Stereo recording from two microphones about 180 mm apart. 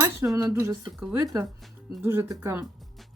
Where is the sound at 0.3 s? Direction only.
15° right (ahead or behind).